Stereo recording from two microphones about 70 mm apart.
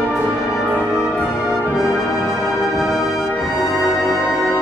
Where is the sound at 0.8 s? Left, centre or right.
Centre.